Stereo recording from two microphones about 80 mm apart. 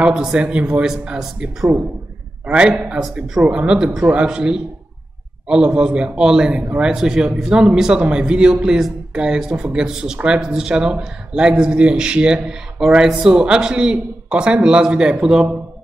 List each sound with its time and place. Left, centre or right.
0.0 s a man's voice: centre